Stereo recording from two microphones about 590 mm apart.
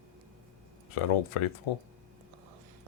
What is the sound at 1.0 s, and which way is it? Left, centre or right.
Speech, left.